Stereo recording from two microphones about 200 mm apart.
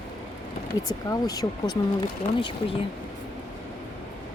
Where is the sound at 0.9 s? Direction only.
20° left (ahead or behind).